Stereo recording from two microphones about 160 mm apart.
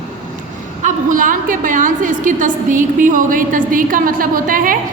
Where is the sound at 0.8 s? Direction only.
55° right (ahead or behind).